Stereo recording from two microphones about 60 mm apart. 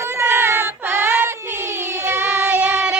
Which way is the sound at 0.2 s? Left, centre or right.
Right.